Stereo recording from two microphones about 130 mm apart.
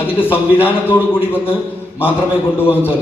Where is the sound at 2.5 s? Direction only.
15° left (ahead or behind).